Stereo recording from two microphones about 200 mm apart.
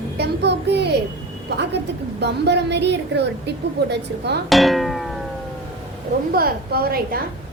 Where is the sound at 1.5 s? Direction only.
55° right (ahead or behind).